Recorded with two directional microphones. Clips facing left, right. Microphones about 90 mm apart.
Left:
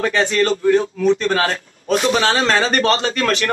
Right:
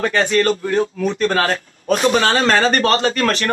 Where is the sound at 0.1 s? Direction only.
45° right (ahead or behind).